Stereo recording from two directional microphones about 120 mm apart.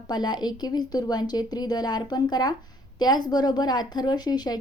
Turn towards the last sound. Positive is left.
turn(degrees=35)  # may be behind; listen again after turning